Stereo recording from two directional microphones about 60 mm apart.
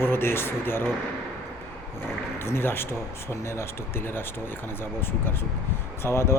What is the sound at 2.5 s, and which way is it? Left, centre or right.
Speech, left.